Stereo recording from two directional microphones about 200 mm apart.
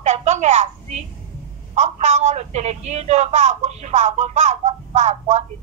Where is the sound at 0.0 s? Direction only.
35° right (ahead or behind).